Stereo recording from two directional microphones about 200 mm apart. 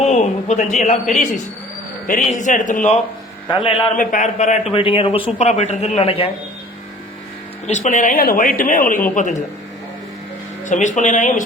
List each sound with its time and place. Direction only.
0.0 s a sound: 35° left (ahead or behind)
2.0 s speech: 40° left (ahead or behind)
3.5 s a man's voice: 25° left (ahead or behind)
3.9 s a man's voice: 40° left (ahead or behind)
7.7 s speech: 40° left (ahead or behind)
10.7 s speech: 40° left (ahead or behind)